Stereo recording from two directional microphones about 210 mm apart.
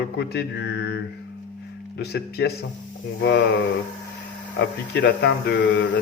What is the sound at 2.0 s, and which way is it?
Speech, 50° left (ahead or behind).